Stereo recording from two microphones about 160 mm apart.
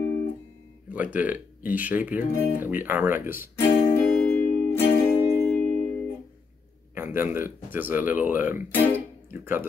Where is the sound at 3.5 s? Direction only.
15° left (ahead or behind).